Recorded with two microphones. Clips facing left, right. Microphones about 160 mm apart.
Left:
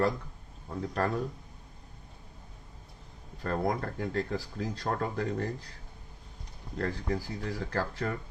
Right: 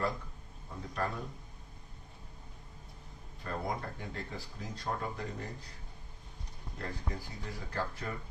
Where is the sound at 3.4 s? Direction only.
60° left (ahead or behind).